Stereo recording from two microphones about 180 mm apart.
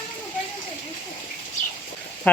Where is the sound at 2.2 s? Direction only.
10° left (ahead or behind).